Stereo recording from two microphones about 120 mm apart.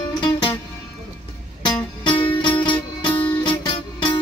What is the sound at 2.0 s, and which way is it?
Music, 45° left (ahead or behind).